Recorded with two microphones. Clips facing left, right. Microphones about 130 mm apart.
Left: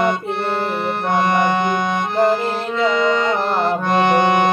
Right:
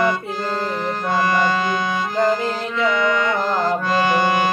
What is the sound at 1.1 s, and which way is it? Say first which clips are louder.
Accordion: left 2 dB; 20° left (ahead or behind).